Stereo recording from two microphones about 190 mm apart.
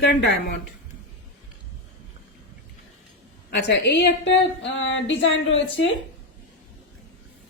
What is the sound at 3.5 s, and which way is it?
Speech, 65° left (ahead or behind).